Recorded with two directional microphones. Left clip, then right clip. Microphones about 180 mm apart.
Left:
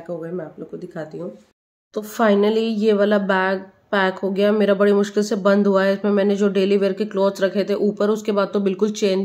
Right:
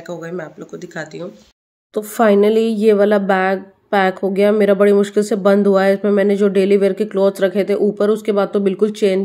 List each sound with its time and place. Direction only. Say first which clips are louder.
0.1 s speech: right 1 dB; centre (ahead or behind)
2.0 s a woman's voice: right 5 dB; 20° right (ahead or behind)